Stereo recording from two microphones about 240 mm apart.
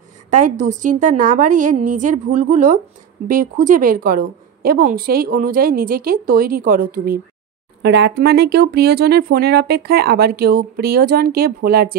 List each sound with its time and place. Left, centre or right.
0.3 s speech: right